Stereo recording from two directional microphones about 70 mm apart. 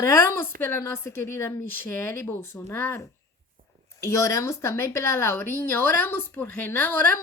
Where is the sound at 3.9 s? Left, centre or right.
Left.